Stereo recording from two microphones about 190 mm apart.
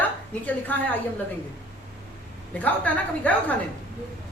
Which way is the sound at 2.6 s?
10° left (ahead or behind).